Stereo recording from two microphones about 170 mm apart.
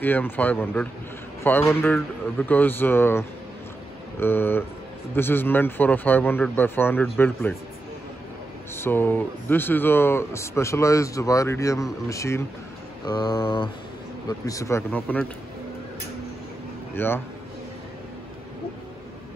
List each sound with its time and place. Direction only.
0.0 s speech: 10° left (ahead or behind)
8.7 s speech: 15° left (ahead or behind)
13.0 s mantra: 25° left (ahead or behind)
14.4 s speech: 20° left (ahead or behind)
16.9 s speech: 15° left (ahead or behind)